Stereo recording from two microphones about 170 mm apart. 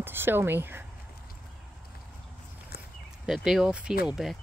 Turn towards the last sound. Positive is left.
turn(degrees=0)  # may be behind; listen again after turning